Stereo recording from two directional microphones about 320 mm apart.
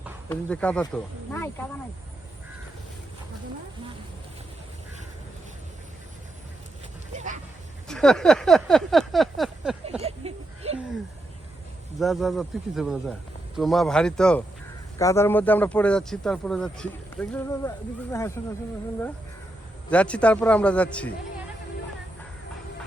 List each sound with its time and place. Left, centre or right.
0.0 s speech: centre
7.9 s speech: centre
10.0 s a sound: centre
11.9 s speech: centre
19.9 s speech: centre